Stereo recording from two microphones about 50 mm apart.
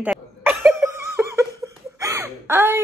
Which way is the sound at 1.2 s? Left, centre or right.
Right.